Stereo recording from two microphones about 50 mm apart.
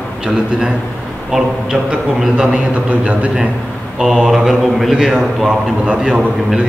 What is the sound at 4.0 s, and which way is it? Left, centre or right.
Speech, centre.